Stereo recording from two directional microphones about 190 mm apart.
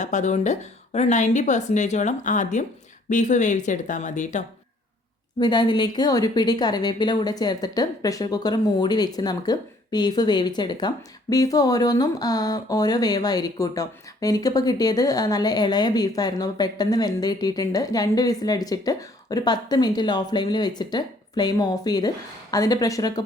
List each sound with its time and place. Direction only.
0.0 s speech: 40° left (ahead or behind)
5.4 s a woman's voice: 25° left (ahead or behind)